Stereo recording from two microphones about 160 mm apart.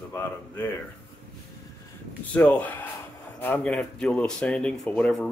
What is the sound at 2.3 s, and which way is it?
Speech, 10° left (ahead or behind).